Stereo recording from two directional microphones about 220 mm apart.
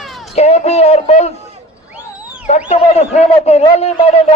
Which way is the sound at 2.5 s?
30° left (ahead or behind).